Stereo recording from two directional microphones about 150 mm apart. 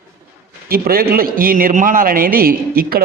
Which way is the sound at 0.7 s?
85° right.